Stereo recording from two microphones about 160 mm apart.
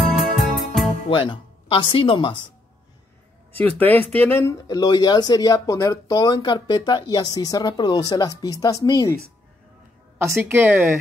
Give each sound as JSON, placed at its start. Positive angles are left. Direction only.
{"t": 0.1, "sound": "music", "side_deg": 0}
{"t": 1.0, "sound": "speech", "side_deg": 35}
{"t": 3.6, "sound": "speech", "side_deg": 10}
{"t": 10.2, "sound": "a woman's voice", "side_deg": -15}